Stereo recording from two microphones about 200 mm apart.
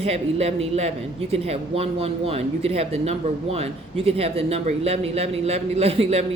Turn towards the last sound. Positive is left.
turn(degrees=-30)  # may be behind; listen again after turning